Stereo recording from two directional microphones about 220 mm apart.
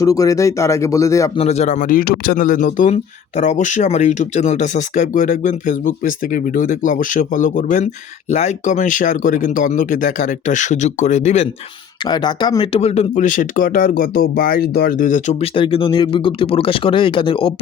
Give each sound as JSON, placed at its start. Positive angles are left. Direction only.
{"t": 0.0, "sound": "speech", "side_deg": 15}
{"t": 1.4, "sound": "speech", "side_deg": 30}
{"t": 12.0, "sound": "speech", "side_deg": 20}